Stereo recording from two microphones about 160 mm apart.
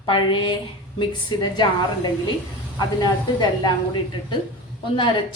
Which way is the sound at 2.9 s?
25° left (ahead or behind).